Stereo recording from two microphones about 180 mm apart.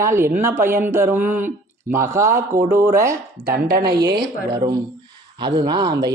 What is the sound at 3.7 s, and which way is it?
Speech, 55° right (ahead or behind).